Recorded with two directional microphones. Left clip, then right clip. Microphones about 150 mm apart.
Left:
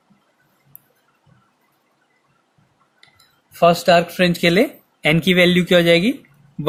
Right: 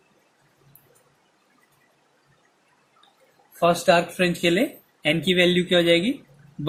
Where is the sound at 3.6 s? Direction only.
65° left (ahead or behind).